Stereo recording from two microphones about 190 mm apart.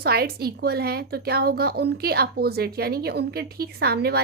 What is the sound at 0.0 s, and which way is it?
A woman's voice, 55° right (ahead or behind).